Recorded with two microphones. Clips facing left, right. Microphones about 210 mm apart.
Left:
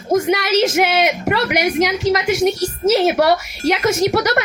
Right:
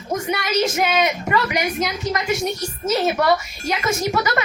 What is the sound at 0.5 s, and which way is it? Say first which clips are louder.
A woman's voice: left 3 dB; 80° left.